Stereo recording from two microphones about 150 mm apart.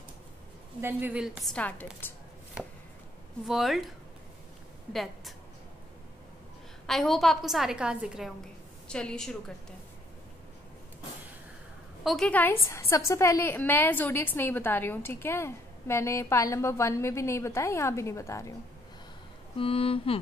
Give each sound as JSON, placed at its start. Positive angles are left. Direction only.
{"t": 0.7, "sound": "a woman's voice", "side_deg": -15}
{"t": 3.4, "sound": "a woman's voice", "side_deg": 0}
{"t": 4.9, "sound": "a woman's voice", "side_deg": 0}
{"t": 6.9, "sound": "a woman's voice", "side_deg": 0}
{"t": 8.8, "sound": "a woman's voice", "side_deg": 5}
{"t": 12.0, "sound": "a woman's voice", "side_deg": 0}
{"t": 19.5, "sound": "mantra", "side_deg": 40}